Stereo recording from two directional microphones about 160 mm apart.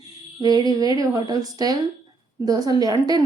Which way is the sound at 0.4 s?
25° right (ahead or behind).